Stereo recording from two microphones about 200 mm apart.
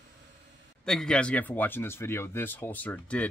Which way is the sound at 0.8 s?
5° left (ahead or behind).